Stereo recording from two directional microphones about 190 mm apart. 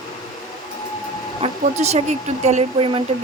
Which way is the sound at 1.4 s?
35° right (ahead or behind).